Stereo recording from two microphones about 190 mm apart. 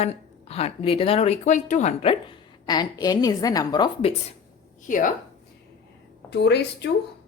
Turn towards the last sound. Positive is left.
turn(degrees=60)  # may be behind; listen again after turning